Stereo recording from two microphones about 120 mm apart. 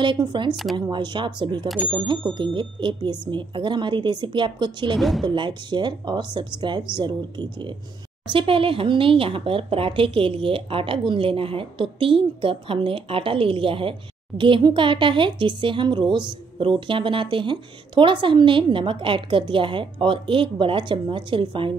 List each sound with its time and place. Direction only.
0.0 s a woman's voice: 40° right (ahead or behind)
0.5 s speech: centre (ahead or behind)
0.7 s a woman's voice: 40° right (ahead or behind)
4.9 s speech: centre (ahead or behind)
5.2 s a woman's voice: 40° right (ahead or behind)